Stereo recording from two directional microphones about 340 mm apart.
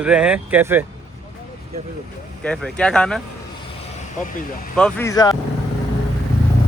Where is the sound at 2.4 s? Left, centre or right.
Centre.